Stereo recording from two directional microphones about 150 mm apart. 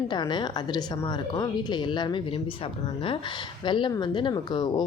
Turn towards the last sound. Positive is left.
turn(degrees=25)  # may be behind; listen again after turning